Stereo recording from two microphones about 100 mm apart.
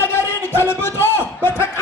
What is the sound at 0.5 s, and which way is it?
Music, 25° left (ahead or behind).